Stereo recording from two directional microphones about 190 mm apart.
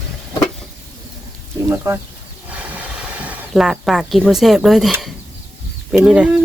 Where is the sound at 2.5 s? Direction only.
10° right (ahead or behind).